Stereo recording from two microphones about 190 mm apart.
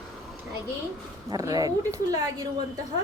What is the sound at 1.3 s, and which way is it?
Speech, 20° right (ahead or behind).